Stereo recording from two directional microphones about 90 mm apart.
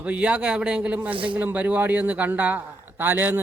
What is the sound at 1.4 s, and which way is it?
A man's voice, 20° right (ahead or behind).